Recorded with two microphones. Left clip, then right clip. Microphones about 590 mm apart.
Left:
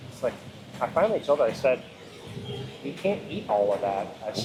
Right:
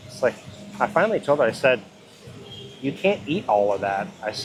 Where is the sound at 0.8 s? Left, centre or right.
Right.